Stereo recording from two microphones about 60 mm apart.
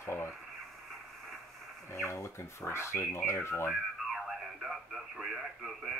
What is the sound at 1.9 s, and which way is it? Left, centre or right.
Speech, left.